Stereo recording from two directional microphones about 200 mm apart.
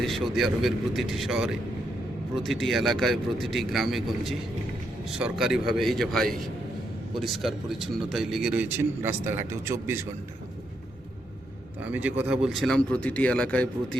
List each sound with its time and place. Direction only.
0.0 s a man's voice: centre (ahead or behind)
11.8 s a man's voice: 10° right (ahead or behind)